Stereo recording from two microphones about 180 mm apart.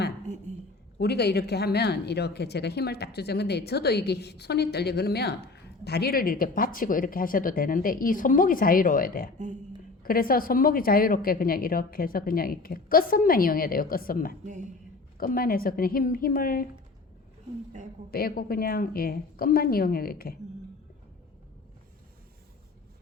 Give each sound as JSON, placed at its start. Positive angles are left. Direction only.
{"t": 0.9, "sound": "a woman's voice", "side_deg": 65}
{"t": 14.4, "sound": "speech", "side_deg": -40}
{"t": 15.2, "sound": "a woman's voice", "side_deg": 55}
{"t": 18.1, "sound": "speech", "side_deg": 55}